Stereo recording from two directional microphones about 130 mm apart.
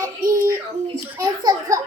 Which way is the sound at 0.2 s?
90° right.